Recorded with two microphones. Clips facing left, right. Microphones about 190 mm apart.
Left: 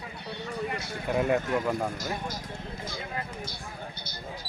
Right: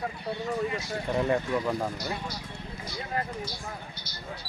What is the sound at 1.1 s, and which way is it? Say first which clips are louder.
Speech: left 1 dB; 5° left (ahead or behind).